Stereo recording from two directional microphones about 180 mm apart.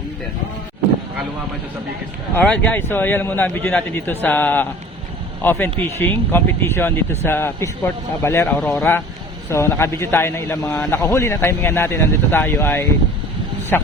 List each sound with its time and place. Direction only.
2.3 s a man's voice: 5° left (ahead or behind)